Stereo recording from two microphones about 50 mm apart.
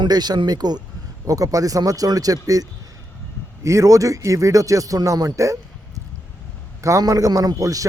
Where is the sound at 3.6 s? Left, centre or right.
Right.